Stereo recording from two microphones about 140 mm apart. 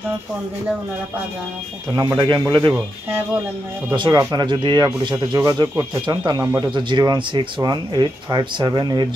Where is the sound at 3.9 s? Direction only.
30° right (ahead or behind).